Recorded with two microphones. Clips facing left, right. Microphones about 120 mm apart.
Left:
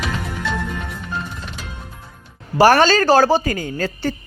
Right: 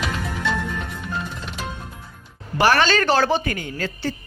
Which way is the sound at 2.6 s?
40° left (ahead or behind).